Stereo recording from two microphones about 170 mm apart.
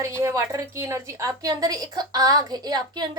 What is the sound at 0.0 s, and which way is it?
A woman's voice, 15° right (ahead or behind).